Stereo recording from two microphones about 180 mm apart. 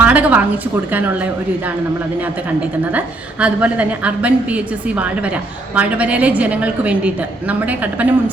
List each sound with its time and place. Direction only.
0.0 s a sound: 10° right (ahead or behind)
0.9 s a woman's voice: 10° right (ahead or behind)
3.4 s a woman's voice: 5° right (ahead or behind)